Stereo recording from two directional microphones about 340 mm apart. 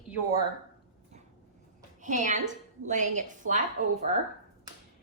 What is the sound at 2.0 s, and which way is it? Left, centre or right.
A woman's voice, right.